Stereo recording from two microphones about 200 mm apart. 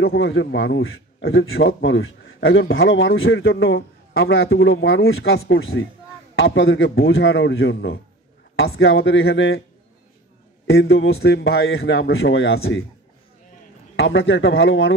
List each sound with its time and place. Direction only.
0.0 s a man's voice: 60° left (ahead or behind)
8.7 s a man's voice: 85° left; by 9.6 s 65° left (ahead or behind)
10.9 s speech: 60° left (ahead or behind)
11.9 s a man's voice: 90° left
13.9 s a man's voice: 75° left (ahead or behind)